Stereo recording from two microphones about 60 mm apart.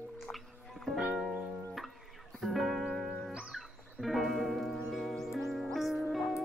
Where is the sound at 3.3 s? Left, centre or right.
Centre.